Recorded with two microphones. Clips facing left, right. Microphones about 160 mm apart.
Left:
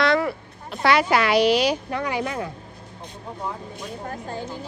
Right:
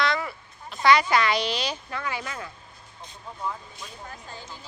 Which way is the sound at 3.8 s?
50° left (ahead or behind).